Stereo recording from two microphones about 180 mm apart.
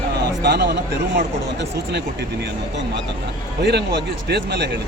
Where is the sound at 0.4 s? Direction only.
65° right (ahead or behind).